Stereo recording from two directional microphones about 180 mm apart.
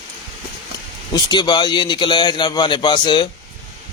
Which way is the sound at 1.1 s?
25° left (ahead or behind).